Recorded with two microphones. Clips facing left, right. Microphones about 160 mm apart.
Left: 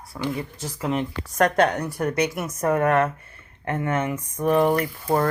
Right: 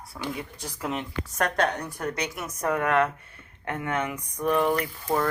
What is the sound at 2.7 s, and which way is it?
Speech, 45° left (ahead or behind).